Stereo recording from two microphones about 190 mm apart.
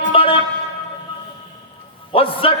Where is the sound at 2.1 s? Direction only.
30° left (ahead or behind).